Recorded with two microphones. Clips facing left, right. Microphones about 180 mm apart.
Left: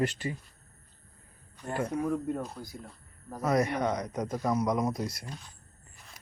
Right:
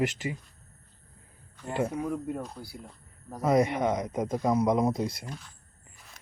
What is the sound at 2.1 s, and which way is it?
A man's voice, 10° right (ahead or behind).